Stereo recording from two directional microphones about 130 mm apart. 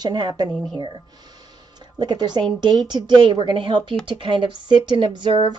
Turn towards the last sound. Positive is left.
turn(degrees=-35)  # may be behind; listen again after turning